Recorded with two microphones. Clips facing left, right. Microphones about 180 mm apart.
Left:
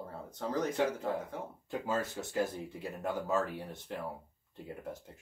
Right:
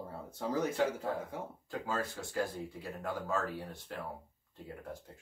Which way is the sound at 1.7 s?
20° left (ahead or behind).